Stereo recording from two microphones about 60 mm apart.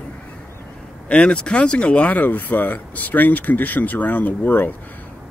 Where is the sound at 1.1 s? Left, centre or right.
Centre.